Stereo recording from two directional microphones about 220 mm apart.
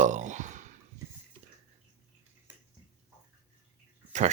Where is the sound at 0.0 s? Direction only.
35° right (ahead or behind).